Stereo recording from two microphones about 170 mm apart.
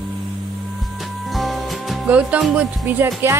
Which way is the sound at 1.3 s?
Centre (ahead or behind).